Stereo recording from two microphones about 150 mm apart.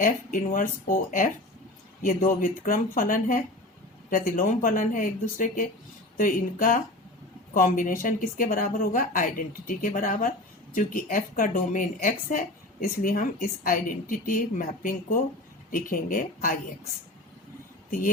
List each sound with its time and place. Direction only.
0.0 s speech: 65° left (ahead or behind)